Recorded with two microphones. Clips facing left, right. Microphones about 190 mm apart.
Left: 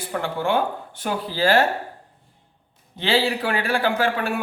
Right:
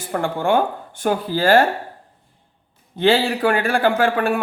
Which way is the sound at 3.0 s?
50° right (ahead or behind).